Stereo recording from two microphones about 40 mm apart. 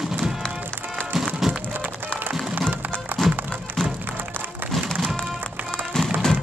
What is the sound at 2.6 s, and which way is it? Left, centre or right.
Music, right.